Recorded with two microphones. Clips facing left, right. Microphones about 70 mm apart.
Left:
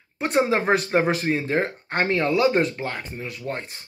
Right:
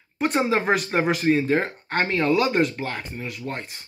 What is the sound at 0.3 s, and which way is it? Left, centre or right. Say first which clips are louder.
Speech: left 2 dB; centre.